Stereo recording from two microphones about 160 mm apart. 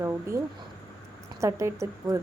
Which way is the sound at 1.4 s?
20° right (ahead or behind).